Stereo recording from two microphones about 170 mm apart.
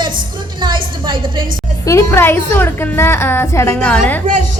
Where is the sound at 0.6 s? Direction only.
30° right (ahead or behind).